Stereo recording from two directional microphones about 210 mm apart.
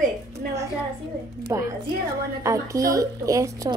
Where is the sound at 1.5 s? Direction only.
15° right (ahead or behind).